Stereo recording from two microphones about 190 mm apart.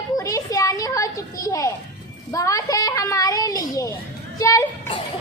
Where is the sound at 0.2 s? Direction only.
20° left (ahead or behind).